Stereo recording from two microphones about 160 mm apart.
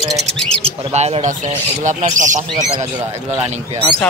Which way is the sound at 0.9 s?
45° right (ahead or behind).